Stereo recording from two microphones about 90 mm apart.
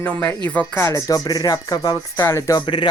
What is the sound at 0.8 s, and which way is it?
Speech, 35° left (ahead or behind).